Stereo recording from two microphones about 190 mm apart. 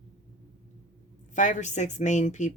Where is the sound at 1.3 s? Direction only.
40° left (ahead or behind).